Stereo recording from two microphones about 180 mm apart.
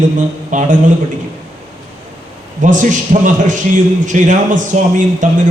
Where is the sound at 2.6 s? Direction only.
45° right (ahead or behind).